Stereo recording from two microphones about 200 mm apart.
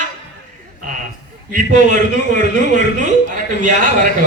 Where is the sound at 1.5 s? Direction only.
40° right (ahead or behind).